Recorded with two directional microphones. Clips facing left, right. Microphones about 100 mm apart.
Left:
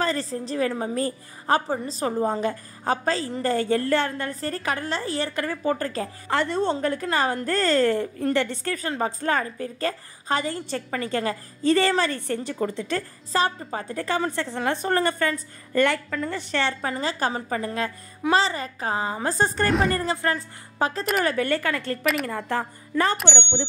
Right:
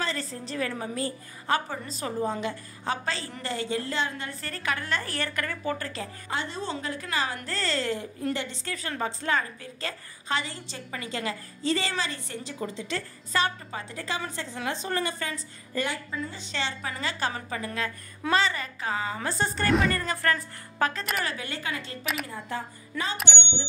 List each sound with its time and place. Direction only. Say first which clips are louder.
0.0 s a woman's voice: left 6 dB; 40° left (ahead or behind)
3.4 s a woman's voice: left 8 dB; 50° left (ahead or behind); by 5.0 s 35° left (ahead or behind)
5.0 s a woman's voice: left 5 dB; 20° left (ahead or behind); by 6.0 s 40° left (ahead or behind)
6.2 s a woman's voice: left 10 dB; 70° left (ahead or behind)
9.0 s a woman's voice: left 3 dB; 45° left (ahead or behind)
13.3 s a woman's voice: left 4 dB; 35° left (ahead or behind)
13.8 s speech: left 9 dB; 50° left (ahead or behind)
17.0 s a woman's voice: left 3 dB; 35° left (ahead or behind)
20.1 s a woman's voice: left 2 dB; 25° left (ahead or behind)
21.2 s a woman's voice: left 10 dB; 50° left (ahead or behind)
23.2 s speech: left 7 dB; 80° left